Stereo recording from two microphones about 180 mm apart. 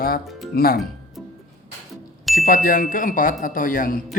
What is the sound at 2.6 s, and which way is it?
Speech, 50° left (ahead or behind).